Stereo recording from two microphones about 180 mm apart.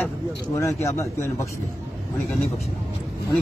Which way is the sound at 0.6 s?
15° left (ahead or behind).